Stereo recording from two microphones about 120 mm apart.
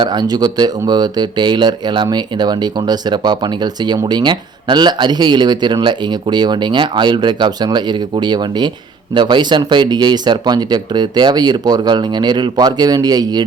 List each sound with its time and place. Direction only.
0.0 s speech: 35° right (ahead or behind)